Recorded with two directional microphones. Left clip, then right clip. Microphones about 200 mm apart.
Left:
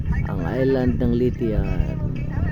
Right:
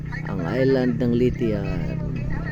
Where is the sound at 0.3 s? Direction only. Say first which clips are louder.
Right 1 dB; 5° left (ahead or behind).